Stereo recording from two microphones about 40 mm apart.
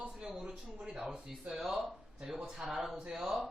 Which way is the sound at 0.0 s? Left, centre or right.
Right.